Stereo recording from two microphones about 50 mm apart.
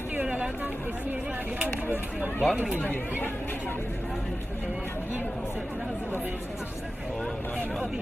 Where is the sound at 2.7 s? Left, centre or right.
Left.